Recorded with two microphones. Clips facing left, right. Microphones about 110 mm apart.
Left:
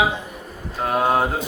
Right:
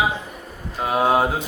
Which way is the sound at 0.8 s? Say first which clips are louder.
Right 1 dB; 5° right (ahead or behind).